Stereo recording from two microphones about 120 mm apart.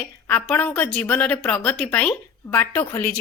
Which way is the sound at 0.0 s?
15° left (ahead or behind).